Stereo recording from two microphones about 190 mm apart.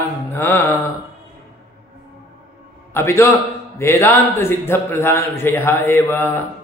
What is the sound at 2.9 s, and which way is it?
A man's voice, 15° left (ahead or behind).